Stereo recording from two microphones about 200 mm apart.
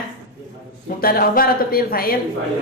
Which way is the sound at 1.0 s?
45° left (ahead or behind).